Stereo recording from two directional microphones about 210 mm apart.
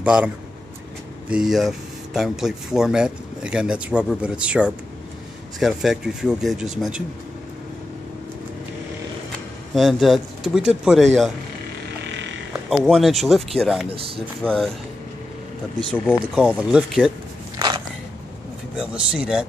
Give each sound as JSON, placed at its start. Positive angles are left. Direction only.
{"t": 0.0, "sound": "speech", "side_deg": -5}
{"t": 1.3, "sound": "speech", "side_deg": 0}
{"t": 9.8, "sound": "speech", "side_deg": 0}
{"t": 12.0, "sound": "frog", "side_deg": -60}
{"t": 12.6, "sound": "speech", "side_deg": 0}
{"t": 13.8, "sound": "speech", "side_deg": -25}
{"t": 14.4, "sound": "speech", "side_deg": 5}
{"t": 16.3, "sound": "speech", "side_deg": -5}
{"t": 17.6, "sound": "biting", "side_deg": -20}
{"t": 18.8, "sound": "speech", "side_deg": -5}